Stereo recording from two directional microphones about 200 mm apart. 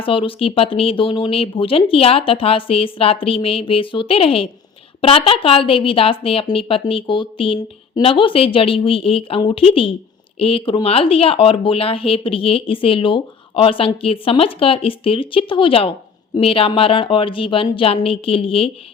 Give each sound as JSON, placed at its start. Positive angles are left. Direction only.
{"t": 0.0, "sound": "speech", "side_deg": 25}